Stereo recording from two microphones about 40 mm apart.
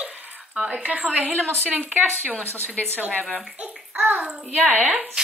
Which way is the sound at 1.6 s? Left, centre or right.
Right.